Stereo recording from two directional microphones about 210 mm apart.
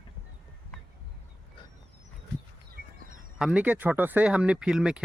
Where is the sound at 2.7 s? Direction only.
40° right (ahead or behind).